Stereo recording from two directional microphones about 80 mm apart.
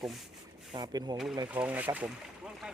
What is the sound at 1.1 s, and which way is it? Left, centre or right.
Speech, centre.